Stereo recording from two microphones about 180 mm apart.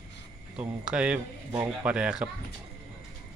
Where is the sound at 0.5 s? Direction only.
5° right (ahead or behind).